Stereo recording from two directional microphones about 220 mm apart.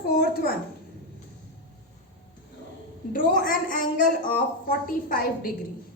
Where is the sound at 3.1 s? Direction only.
40° left (ahead or behind).